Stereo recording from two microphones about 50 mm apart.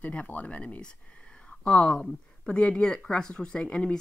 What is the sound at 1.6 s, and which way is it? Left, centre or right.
Speech, centre.